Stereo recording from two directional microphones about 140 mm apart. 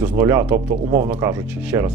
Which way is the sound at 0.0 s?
20° right (ahead or behind).